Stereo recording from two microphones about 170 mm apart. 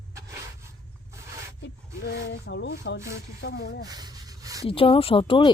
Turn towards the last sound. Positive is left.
turn(degrees=30)  # may be behind; listen again after turning